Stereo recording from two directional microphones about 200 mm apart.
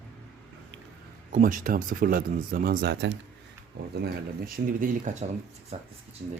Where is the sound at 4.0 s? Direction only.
45° right (ahead or behind).